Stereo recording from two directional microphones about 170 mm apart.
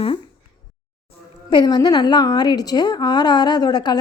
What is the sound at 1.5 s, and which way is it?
A woman's voice, 25° left (ahead or behind).